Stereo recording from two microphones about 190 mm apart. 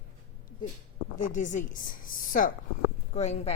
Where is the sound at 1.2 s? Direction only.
40° left (ahead or behind).